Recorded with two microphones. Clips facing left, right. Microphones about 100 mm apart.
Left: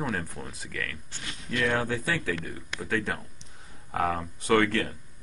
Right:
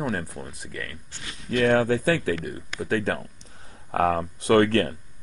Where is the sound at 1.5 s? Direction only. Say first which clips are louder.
Right 7 dB; 45° right (ahead or behind).